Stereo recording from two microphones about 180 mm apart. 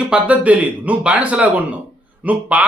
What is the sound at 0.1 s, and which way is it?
Speech, 10° right (ahead or behind).